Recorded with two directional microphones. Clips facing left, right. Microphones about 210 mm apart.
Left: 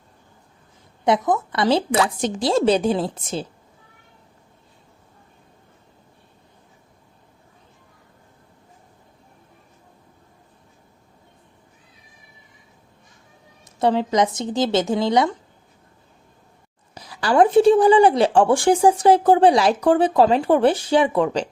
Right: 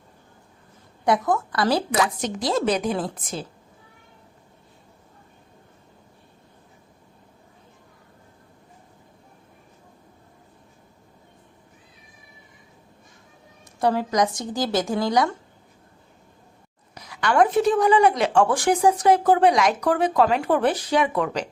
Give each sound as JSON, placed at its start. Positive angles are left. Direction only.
{"t": 1.0, "sound": "speech", "side_deg": 20}
{"t": 13.7, "sound": "speech", "side_deg": 25}
{"t": 16.9, "sound": "speech", "side_deg": 30}